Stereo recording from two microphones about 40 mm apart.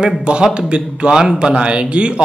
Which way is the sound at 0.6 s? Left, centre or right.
Right.